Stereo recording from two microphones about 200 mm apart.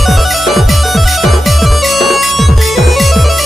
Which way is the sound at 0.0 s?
Centre (ahead or behind).